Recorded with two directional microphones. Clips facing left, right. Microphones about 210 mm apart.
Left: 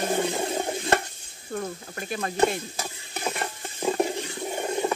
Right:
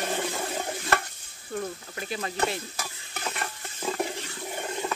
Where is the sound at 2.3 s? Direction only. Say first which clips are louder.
Left 8 dB; 25° left (ahead or behind).